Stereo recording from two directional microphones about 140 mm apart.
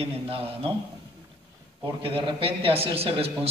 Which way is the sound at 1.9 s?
40° right (ahead or behind).